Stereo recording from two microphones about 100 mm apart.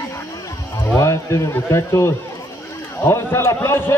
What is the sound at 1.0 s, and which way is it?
A man's voice, 30° left (ahead or behind).